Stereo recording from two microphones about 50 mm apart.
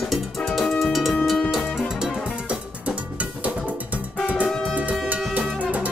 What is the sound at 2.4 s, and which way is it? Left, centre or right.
Cowbell, right.